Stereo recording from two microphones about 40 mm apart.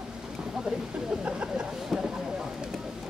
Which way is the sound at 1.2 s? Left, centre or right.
Right.